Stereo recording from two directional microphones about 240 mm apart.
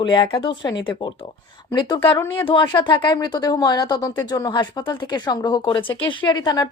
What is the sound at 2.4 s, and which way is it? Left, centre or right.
Speech, centre.